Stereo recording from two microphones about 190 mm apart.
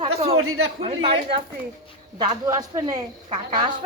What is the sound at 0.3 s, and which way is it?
Speech, 90° right.